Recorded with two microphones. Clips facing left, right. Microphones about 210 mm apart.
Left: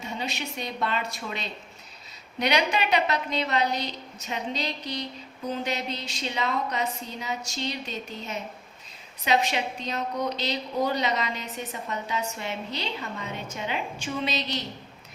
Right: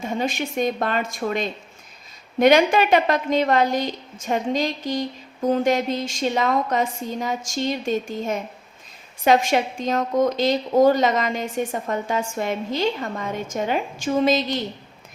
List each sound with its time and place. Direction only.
0.0 s a woman's voice: 50° right (ahead or behind)